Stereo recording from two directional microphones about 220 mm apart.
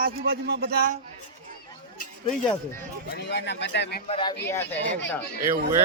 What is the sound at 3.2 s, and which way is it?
Speech, 50° left (ahead or behind).